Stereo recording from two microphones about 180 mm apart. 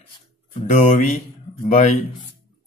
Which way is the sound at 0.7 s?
40° left (ahead or behind).